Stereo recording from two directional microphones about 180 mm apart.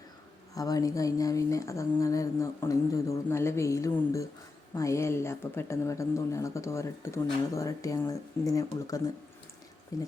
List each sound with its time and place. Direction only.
0.5 s speech: 20° left (ahead or behind)